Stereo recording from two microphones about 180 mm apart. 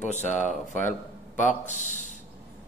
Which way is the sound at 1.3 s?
45° left (ahead or behind).